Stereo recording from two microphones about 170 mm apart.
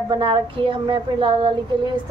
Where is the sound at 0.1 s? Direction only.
30° right (ahead or behind).